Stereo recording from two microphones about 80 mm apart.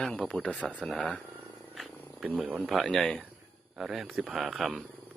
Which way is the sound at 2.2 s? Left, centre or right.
Centre.